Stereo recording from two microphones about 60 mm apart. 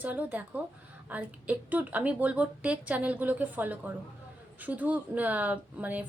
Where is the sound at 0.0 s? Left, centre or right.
Right.